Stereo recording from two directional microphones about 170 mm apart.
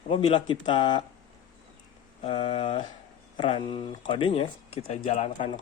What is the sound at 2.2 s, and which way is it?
A man's voice, 30° left (ahead or behind).